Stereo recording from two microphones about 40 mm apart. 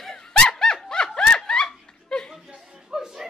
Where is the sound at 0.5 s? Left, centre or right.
Centre.